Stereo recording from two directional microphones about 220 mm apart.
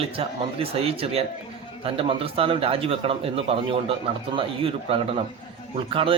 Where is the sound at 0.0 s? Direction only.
25° right (ahead or behind).